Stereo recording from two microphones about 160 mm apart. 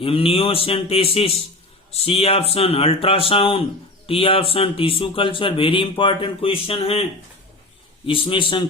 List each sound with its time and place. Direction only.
0.0 s speech: 35° left (ahead or behind)
8.0 s speech: 35° left (ahead or behind)